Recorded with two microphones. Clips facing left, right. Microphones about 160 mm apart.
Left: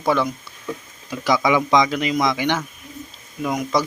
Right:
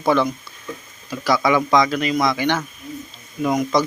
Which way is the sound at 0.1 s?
10° left (ahead or behind).